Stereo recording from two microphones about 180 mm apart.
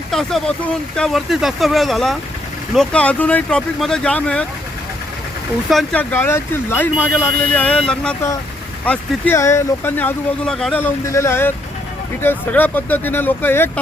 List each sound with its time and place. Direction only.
0.1 s speech: centre (ahead or behind)
5.7 s speech: 5° left (ahead or behind)